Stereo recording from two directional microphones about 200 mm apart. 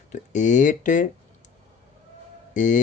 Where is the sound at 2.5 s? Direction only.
40° left (ahead or behind).